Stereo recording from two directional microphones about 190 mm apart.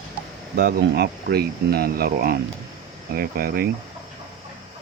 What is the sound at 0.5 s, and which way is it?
Speech, 55° right (ahead or behind).